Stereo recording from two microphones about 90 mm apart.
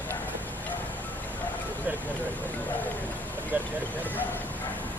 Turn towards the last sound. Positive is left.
turn(degrees=-20)  # may be behind; listen again after turning